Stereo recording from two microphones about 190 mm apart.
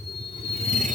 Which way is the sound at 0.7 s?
40° right (ahead or behind).